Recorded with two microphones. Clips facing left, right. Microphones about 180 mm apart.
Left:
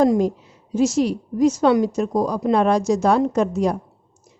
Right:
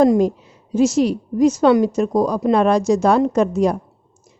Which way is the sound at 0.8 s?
70° right (ahead or behind).